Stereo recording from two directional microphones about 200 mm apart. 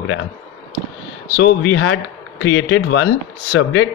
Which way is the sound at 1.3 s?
65° left (ahead or behind).